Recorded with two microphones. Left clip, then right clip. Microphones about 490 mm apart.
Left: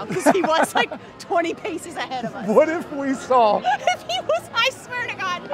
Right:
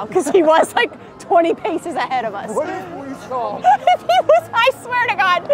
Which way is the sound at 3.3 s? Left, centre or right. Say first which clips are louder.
Left 7 dB; left.